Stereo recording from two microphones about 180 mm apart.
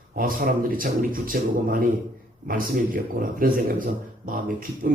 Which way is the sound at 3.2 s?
50° right (ahead or behind).